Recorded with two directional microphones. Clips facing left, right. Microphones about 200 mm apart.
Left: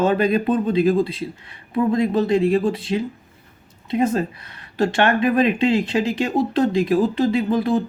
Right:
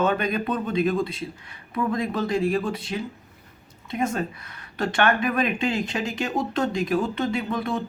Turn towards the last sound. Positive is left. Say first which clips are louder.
# left 7 dB
turn(degrees=30)  # may be behind; listen again after turning